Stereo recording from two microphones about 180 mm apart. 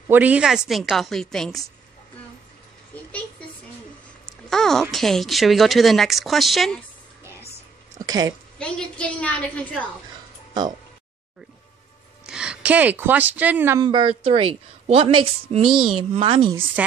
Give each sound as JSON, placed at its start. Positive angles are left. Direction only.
{"t": 0.1, "sound": "a woman's voice", "side_deg": -10}
{"t": 4.5, "sound": "a sound", "side_deg": 0}
{"t": 4.9, "sound": "speech", "side_deg": 0}
{"t": 8.0, "sound": "a woman's voice", "side_deg": -20}
{"t": 8.5, "sound": "a woman's voice", "side_deg": 5}
{"t": 12.3, "sound": "speech", "side_deg": -5}
{"t": 13.7, "sound": "a woman's voice", "side_deg": -25}